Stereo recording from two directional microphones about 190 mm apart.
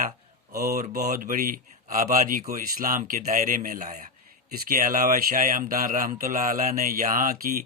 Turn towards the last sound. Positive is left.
turn(degrees=-45)  # may be behind; listen again after turning